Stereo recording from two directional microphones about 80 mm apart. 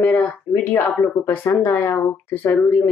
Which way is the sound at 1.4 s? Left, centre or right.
Left.